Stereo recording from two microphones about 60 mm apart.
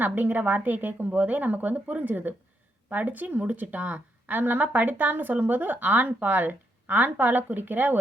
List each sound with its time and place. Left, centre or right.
0.0 s a woman's voice: right